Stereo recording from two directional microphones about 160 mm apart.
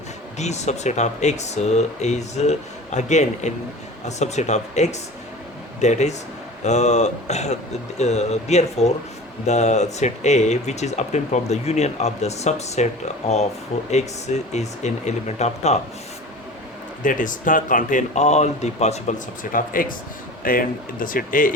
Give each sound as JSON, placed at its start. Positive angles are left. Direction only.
{"t": 0.3, "sound": "speech", "side_deg": 45}
{"t": 17.0, "sound": "speech", "side_deg": 55}